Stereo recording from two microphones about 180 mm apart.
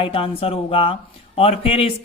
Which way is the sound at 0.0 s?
30° left (ahead or behind).